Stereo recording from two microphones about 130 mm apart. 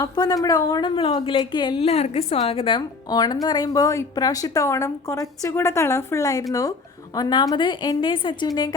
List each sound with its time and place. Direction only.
0.0 s a woman's voice: 30° left (ahead or behind)